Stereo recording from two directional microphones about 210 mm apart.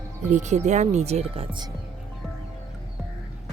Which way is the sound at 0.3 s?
35° right (ahead or behind).